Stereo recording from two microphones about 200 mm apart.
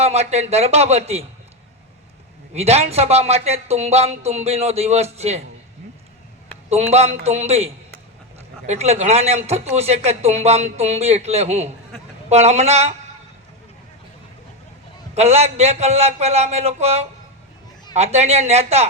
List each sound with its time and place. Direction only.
0.0 s speech: 35° right (ahead or behind)
2.5 s speech: 30° right (ahead or behind)
6.7 s speech: 30° right (ahead or behind)
15.1 s speech: 30° right (ahead or behind)